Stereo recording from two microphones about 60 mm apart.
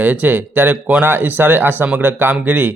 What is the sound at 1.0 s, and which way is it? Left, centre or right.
Speech, right.